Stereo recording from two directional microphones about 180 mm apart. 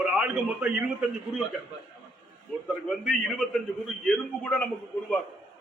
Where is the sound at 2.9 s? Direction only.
Centre (ahead or behind).